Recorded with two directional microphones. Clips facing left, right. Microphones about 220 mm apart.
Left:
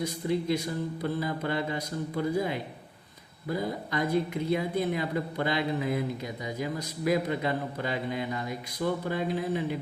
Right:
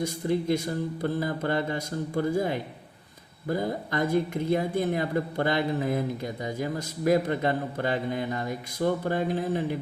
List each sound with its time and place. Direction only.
0.0 s speech: 50° right (ahead or behind)